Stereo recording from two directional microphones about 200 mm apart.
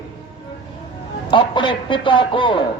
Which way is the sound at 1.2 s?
25° left (ahead or behind).